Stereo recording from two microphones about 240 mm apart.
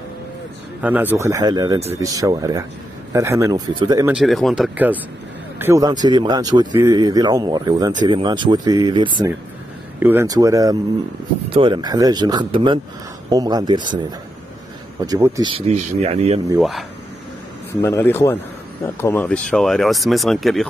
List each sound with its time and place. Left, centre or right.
0.8 s speech: centre
4.2 s speech: centre
15.0 s speech: centre
16.4 s speech: centre
17.8 s speech: centre